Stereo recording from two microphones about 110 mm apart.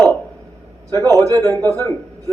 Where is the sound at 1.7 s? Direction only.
25° left (ahead or behind).